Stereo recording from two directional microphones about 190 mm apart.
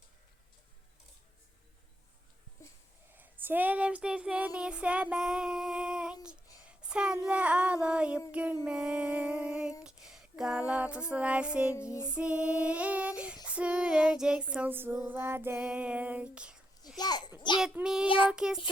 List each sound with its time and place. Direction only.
3.2 s child singing: 10° right (ahead or behind)
8.3 s female singing: 5° right (ahead or behind)
8.6 s a sound: 5° right (ahead or behind)
9.8 s female singing: 5° right (ahead or behind)
17.0 s a sound: 20° left (ahead or behind)
17.6 s child singing: 5° right (ahead or behind)